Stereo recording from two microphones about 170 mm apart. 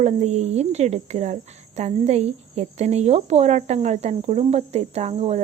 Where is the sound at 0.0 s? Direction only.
40° right (ahead or behind).